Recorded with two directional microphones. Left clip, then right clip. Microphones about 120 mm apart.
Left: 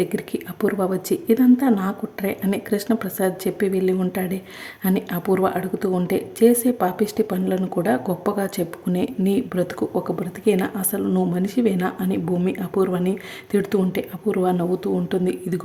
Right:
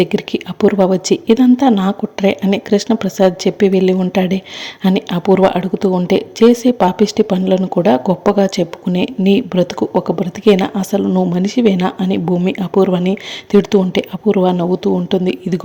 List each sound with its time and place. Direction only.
0.0 s a woman's voice: 20° right (ahead or behind)